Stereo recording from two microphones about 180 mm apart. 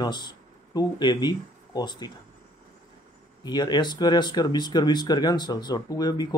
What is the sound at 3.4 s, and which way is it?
Speech, 25° left (ahead or behind).